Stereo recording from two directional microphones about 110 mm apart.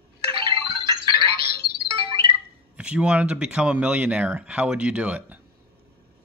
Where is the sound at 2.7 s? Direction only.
10° right (ahead or behind).